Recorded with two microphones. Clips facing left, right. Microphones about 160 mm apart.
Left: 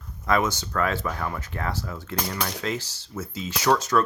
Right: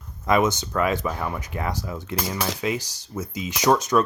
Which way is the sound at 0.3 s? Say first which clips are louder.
Right 3 dB; 20° right (ahead or behind).